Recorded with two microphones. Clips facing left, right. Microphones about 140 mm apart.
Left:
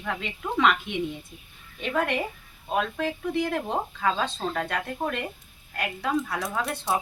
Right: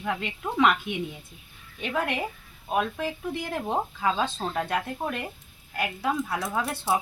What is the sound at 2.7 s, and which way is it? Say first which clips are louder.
A woman's voice: even; 5° right (ahead or behind).